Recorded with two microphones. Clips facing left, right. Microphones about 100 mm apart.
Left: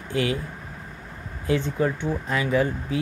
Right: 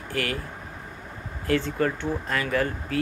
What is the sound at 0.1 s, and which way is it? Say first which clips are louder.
Speech: left 4 dB; 20° left (ahead or behind).